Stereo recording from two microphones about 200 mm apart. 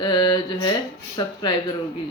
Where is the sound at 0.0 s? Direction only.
20° left (ahead or behind).